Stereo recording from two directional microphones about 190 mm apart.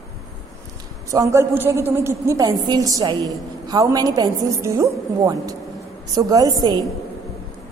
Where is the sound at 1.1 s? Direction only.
15° right (ahead or behind).